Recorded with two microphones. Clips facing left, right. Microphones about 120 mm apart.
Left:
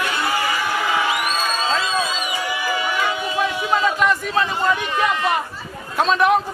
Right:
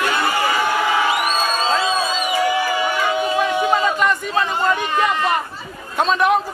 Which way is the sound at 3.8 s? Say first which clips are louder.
Even; centre (ahead or behind).